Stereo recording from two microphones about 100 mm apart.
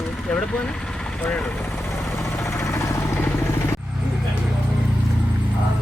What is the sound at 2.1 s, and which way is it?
Vehicle, 25° left (ahead or behind).